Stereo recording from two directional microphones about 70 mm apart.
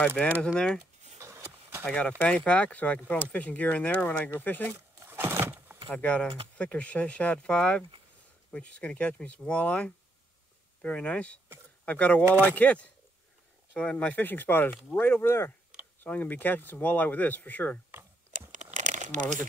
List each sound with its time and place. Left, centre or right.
0.0 s speech: centre
0.4 s speech: centre
1.2 s a sound: right
1.9 s speech: centre
4.7 s a sound: right
5.9 s speech: centre